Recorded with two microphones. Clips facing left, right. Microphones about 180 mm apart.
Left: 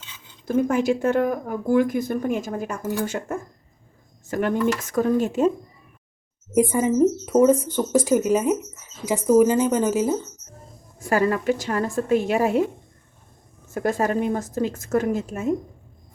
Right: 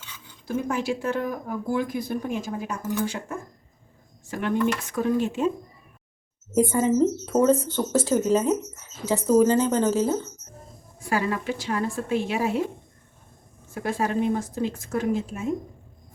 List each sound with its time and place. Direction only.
0.4 s speech: 50° left (ahead or behind)
6.5 s speech: 15° left (ahead or behind)
11.0 s speech: 45° left (ahead or behind)
13.7 s speech: 45° left (ahead or behind)